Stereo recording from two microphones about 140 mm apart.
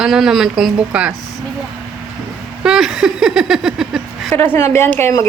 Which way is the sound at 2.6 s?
5° right (ahead or behind).